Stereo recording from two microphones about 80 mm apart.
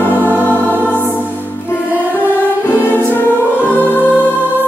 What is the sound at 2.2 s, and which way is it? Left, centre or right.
Music, left.